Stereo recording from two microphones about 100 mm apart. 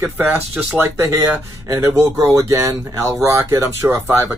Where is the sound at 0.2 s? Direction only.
25° right (ahead or behind).